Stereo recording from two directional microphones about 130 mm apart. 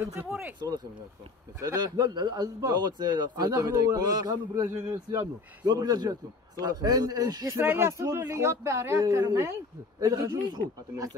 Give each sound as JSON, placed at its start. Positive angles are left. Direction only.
{"t": 0.1, "sound": "speech", "side_deg": -15}
{"t": 1.6, "sound": "a man's voice", "side_deg": -30}